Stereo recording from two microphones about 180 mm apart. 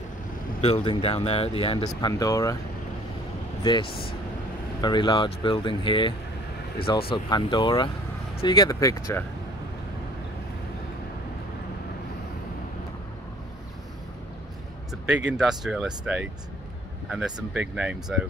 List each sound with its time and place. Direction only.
0.6 s speech: 35° left (ahead or behind); by 2.5 s 20° left (ahead or behind)
3.6 s speech: 25° left (ahead or behind)
14.9 s speech: 5° right (ahead or behind)
17.6 s speech: 5° right (ahead or behind)